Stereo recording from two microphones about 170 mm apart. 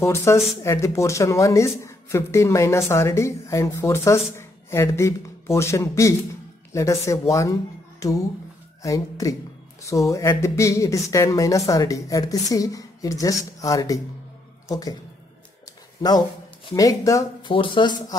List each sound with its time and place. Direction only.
0.0 s speech: 15° left (ahead or behind)
16.0 s speech: 25° left (ahead or behind)